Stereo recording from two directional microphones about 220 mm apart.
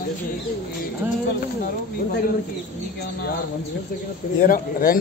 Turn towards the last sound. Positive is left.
turn(degrees=40)  # may be behind; listen again after turning